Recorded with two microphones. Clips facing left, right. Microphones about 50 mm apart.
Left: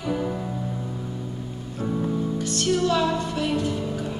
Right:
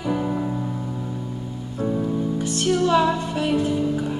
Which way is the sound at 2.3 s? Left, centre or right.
Right.